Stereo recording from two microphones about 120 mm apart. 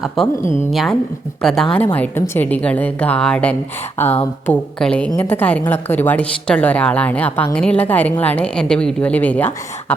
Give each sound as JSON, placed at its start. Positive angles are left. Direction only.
{"t": 0.2, "sound": "a woman's voice", "side_deg": 5}
{"t": 1.7, "sound": "a woman's voice", "side_deg": 15}
{"t": 4.0, "sound": "speech", "side_deg": 20}
{"t": 4.8, "sound": "a woman's voice", "side_deg": 10}